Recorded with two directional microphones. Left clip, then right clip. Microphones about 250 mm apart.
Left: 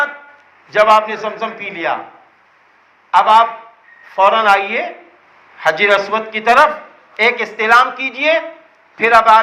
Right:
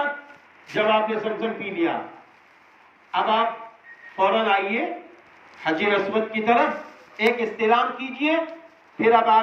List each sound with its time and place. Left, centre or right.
0.7 s a man's voice: left
3.1 s a man's voice: left